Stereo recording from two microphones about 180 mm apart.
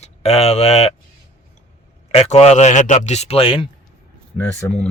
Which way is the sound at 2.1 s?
35° left (ahead or behind).